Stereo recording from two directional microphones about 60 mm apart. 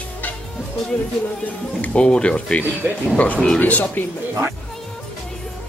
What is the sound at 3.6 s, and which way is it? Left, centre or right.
Speech, left.